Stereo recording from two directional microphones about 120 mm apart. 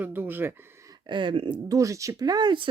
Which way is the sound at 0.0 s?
15° right (ahead or behind).